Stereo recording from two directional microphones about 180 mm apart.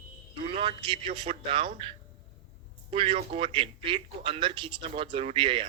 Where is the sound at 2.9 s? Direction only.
30° right (ahead or behind).